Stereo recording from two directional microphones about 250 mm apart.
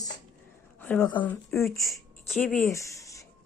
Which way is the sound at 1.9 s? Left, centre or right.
Centre.